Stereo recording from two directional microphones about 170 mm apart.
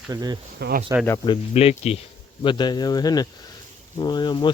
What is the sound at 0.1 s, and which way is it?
Speech, 25° right (ahead or behind).